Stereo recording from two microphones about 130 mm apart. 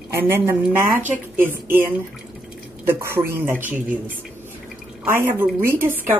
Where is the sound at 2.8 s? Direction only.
20° right (ahead or behind).